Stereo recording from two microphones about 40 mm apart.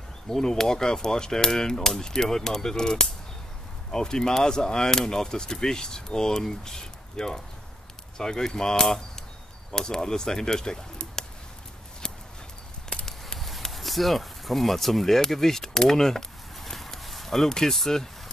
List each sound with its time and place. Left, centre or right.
0.3 s speech: centre
12.9 s a sound: centre
13.4 s speech: centre